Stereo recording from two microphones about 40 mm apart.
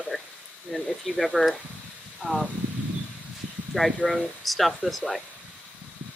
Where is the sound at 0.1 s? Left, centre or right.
Centre.